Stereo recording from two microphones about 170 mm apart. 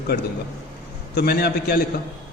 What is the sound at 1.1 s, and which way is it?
Speech, 65° left (ahead or behind).